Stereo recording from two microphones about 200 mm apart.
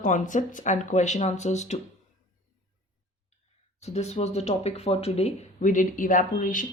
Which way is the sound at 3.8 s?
35° left (ahead or behind).